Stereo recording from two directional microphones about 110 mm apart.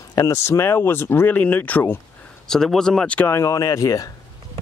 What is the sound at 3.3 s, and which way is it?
Speech, 30° left (ahead or behind).